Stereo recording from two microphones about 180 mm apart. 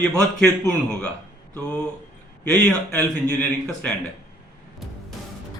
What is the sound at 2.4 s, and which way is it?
Speech, 5° left (ahead or behind).